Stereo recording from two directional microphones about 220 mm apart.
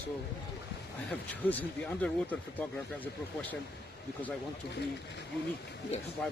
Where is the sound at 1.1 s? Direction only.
5° left (ahead or behind).